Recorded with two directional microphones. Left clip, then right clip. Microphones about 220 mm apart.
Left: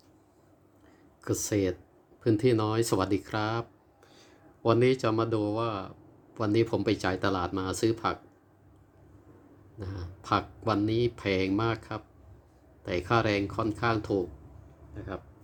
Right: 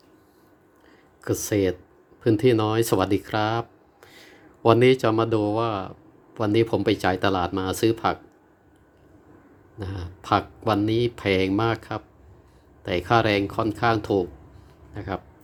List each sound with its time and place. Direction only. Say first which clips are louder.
1.2 s speech: right 6 dB; 10° right (ahead or behind)
4.0 s speech: right 8 dB; 25° right (ahead or behind)
9.7 s speech: right 6 dB; 15° right (ahead or behind)